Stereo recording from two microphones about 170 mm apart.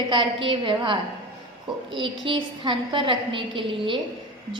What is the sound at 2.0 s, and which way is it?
A woman's voice, 30° right (ahead or behind).